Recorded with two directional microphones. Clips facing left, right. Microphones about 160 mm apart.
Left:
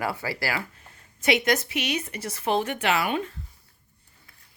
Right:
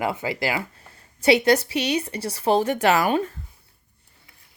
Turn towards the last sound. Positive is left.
turn(degrees=-40)  # may be behind; listen again after turning